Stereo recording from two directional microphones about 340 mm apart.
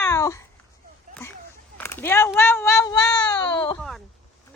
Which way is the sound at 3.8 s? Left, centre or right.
Centre.